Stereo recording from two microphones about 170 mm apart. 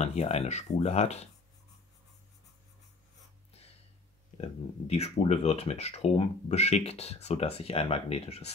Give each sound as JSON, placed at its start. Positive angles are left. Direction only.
{"t": 0.0, "sound": "speech", "side_deg": 40}
{"t": 4.4, "sound": "speech", "side_deg": 35}